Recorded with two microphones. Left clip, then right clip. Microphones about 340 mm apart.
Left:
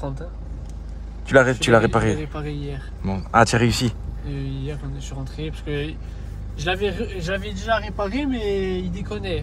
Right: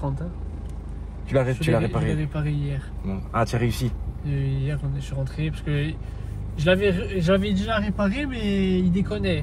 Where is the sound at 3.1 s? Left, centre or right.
Left.